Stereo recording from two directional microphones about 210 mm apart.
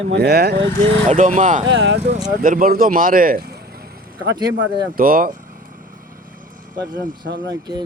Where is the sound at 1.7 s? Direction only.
60° right (ahead or behind).